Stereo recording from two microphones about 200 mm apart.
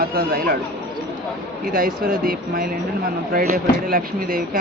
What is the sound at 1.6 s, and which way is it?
Speech, 45° right (ahead or behind).